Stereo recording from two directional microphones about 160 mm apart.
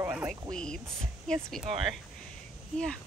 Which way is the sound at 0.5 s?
5° left (ahead or behind).